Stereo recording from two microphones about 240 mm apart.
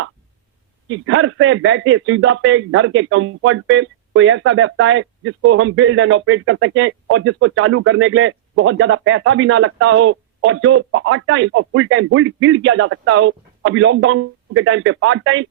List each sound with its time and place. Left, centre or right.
0.9 s speech: right